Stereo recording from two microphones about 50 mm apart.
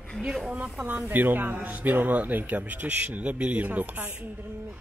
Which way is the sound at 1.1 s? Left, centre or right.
Right.